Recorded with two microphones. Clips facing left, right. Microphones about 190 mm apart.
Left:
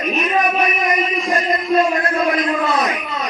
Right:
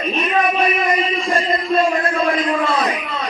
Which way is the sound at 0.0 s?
30° right (ahead or behind).